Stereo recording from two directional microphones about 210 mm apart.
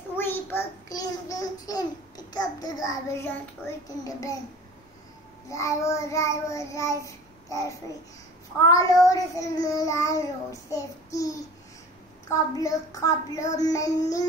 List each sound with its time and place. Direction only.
0.2 s babbling: 10° left (ahead or behind)
4.0 s child singing: 15° left (ahead or behind)
5.5 s child singing: 15° left (ahead or behind)
12.3 s child singing: 15° left (ahead or behind)